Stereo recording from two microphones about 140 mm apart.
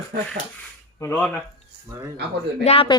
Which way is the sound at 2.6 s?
45° left (ahead or behind).